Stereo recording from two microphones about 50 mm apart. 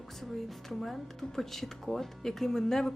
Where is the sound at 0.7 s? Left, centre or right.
Centre.